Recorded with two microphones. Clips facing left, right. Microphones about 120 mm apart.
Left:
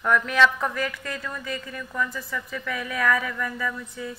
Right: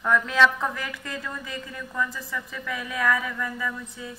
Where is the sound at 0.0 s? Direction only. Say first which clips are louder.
Even; 20° right (ahead or behind).